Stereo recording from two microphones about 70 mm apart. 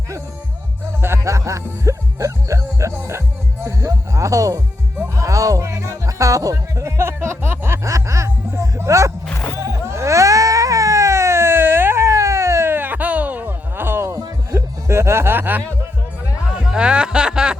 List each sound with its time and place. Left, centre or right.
1.0 s music: right
9.6 s baby cry: right
14.2 s music: right
16.7 s music: centre